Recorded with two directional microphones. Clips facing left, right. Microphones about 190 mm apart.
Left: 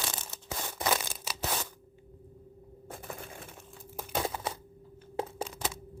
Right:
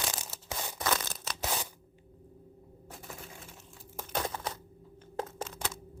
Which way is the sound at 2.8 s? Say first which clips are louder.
Left 4 dB; 55° left (ahead or behind).